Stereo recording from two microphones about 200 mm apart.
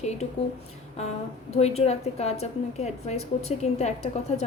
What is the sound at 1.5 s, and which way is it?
A woman's voice, 30° left (ahead or behind).